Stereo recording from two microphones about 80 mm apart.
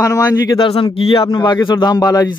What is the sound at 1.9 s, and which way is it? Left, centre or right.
Speech, left.